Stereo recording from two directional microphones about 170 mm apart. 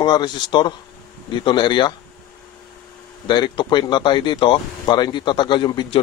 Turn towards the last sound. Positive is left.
turn(degrees=25)  # may be behind; listen again after turning